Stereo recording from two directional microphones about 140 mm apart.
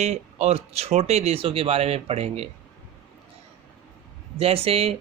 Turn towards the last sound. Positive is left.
turn(degrees=-45)  # may be behind; listen again after turning